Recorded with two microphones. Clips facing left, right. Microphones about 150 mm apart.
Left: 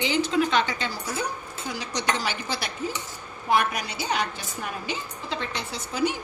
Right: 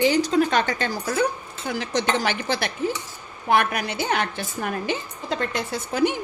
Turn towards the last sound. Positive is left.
turn(degrees=-55)  # may be behind; listen again after turning